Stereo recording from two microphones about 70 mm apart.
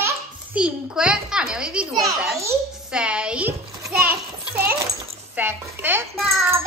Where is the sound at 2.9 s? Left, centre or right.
Centre.